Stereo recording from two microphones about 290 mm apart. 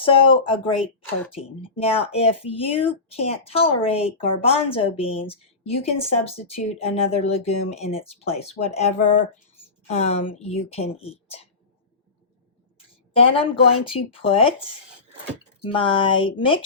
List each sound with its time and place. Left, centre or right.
0.0 s speech: centre
13.1 s speech: centre